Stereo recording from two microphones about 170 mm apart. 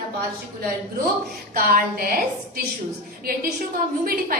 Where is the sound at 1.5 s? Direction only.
60° right (ahead or behind).